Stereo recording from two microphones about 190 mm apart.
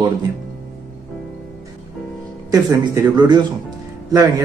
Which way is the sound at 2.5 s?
15° right (ahead or behind).